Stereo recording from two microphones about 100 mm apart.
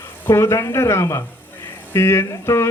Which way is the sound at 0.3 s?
30° left (ahead or behind).